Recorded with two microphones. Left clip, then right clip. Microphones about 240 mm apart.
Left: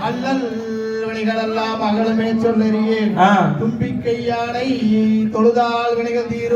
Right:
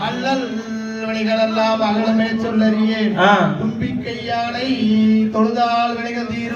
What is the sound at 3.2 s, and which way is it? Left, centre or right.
Speech, left.